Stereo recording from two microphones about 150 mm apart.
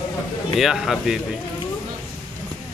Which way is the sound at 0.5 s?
Centre (ahead or behind).